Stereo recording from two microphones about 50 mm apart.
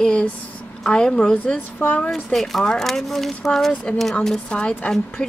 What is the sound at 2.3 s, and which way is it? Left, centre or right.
Speech, centre.